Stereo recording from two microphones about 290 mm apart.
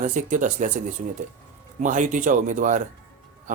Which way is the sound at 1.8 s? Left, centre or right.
Right.